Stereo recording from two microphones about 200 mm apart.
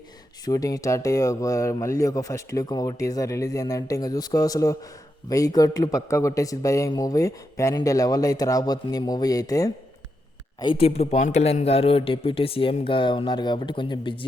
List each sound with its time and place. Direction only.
0.4 s speech: 15° left (ahead or behind)